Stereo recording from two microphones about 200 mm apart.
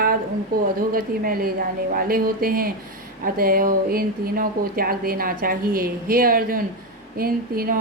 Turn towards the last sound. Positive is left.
turn(degrees=-45)  # may be behind; listen again after turning